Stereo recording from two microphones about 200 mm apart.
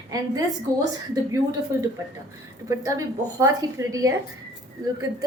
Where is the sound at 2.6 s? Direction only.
15° right (ahead or behind).